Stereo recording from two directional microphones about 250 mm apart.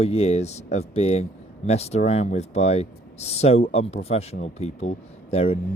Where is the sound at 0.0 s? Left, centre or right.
Left.